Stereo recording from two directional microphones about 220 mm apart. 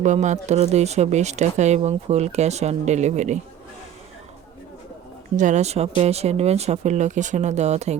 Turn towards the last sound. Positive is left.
turn(degrees=-30)  # may be behind; listen again after turning